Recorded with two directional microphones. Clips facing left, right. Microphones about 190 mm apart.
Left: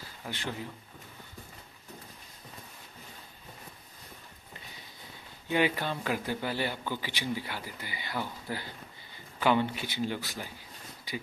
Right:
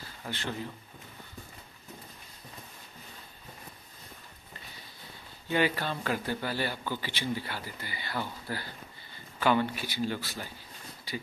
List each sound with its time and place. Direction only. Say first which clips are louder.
0.2 s speech: right 1 dB; 15° left (ahead or behind)
5.5 s a man's voice: even; 15° left (ahead or behind)